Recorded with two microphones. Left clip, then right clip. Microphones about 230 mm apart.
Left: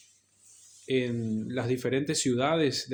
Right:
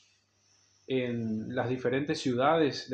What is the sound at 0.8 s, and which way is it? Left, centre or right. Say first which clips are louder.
Speech: left 2 dB; left.